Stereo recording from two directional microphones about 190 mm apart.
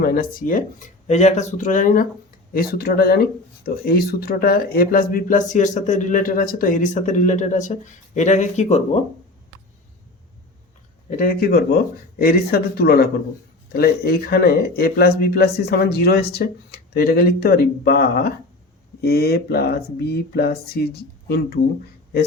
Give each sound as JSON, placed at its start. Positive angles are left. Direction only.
{"t": 0.0, "sound": "speech", "side_deg": 50}
{"t": 11.2, "sound": "speech", "side_deg": 50}